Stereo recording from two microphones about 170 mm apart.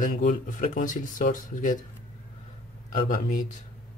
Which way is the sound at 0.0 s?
45° left (ahead or behind).